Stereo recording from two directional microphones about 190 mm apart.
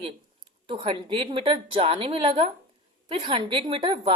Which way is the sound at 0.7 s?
25° right (ahead or behind).